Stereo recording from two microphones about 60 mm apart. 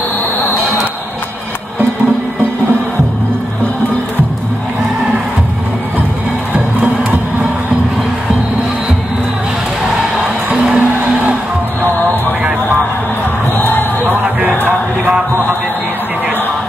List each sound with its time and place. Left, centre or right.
10.2 s music: right
13.6 s music: left